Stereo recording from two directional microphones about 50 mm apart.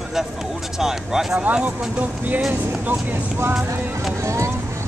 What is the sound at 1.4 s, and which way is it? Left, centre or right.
Speech, right.